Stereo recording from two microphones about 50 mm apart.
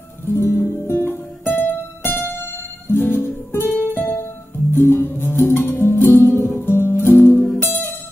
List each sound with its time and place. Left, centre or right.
0.2 s music: left
7.0 s music: left
7.3 s music: centre